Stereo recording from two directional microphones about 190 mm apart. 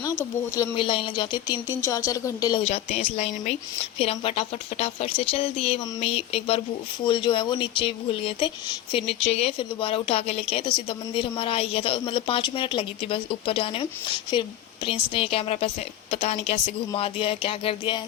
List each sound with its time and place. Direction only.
0.0 s speech: 20° left (ahead or behind)
14.8 s speech: 30° left (ahead or behind)